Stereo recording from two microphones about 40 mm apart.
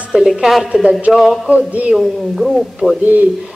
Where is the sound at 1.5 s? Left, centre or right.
Right.